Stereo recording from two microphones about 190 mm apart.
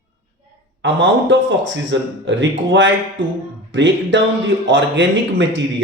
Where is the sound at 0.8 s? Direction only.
75° right (ahead or behind).